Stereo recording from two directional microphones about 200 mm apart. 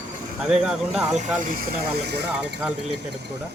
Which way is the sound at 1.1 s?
40° right (ahead or behind).